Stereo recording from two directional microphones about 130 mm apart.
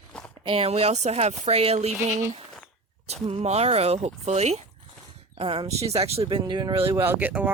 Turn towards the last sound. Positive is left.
turn(degrees=-15)  # may be behind; listen again after turning